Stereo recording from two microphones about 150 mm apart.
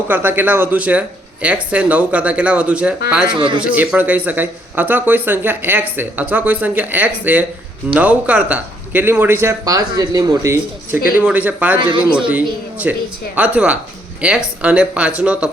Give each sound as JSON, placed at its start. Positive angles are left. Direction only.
{"t": 0.1, "sound": "speech", "side_deg": -15}
{"t": 3.3, "sound": "a man's voice", "side_deg": -35}
{"t": 3.6, "sound": "speech", "side_deg": -10}
{"t": 11.8, "sound": "a man's voice", "side_deg": -30}
{"t": 12.9, "sound": "speech", "side_deg": -10}